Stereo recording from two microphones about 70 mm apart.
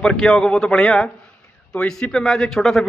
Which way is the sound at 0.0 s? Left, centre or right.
Centre.